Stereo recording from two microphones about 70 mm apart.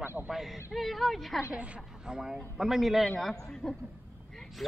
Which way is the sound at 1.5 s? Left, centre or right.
Centre.